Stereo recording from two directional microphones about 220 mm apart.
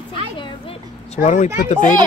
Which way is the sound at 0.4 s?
25° left (ahead or behind).